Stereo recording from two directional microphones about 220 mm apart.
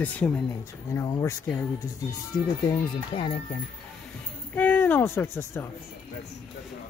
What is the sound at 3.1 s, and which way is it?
Speech, 25° left (ahead or behind).